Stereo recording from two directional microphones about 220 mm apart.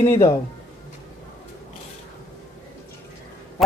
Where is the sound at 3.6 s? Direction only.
Centre (ahead or behind).